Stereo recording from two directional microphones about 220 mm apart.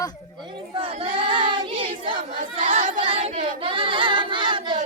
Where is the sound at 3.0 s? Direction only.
25° right (ahead or behind).